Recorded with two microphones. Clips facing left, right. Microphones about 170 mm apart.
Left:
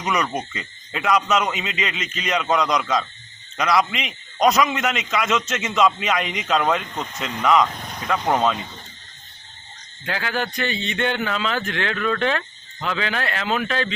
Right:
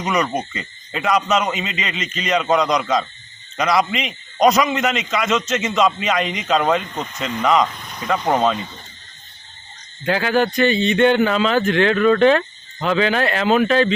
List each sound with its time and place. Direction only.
0.0 s a man's voice: 5° left (ahead or behind)
10.1 s speech: 25° right (ahead or behind)